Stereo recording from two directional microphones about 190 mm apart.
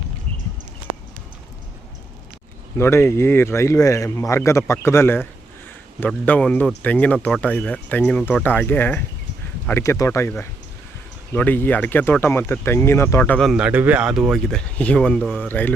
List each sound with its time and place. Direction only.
2.7 s speech: 15° left (ahead or behind)